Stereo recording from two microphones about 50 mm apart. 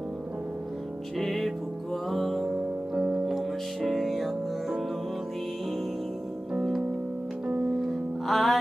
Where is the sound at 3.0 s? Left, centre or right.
Centre.